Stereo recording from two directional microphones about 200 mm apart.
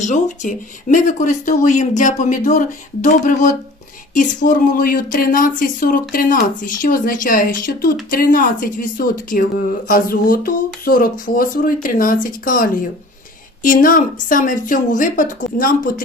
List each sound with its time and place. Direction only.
0.0 s speech: 40° left (ahead or behind)